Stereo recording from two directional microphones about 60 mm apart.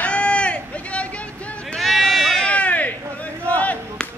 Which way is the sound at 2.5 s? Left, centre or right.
Left.